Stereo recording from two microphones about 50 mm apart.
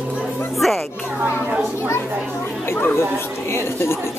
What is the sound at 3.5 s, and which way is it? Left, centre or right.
Speech, left.